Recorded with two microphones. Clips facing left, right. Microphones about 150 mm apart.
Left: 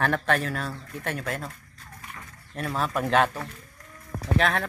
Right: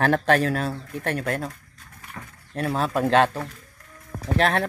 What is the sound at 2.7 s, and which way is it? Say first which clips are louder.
Speech: right 4 dB; 35° right (ahead or behind).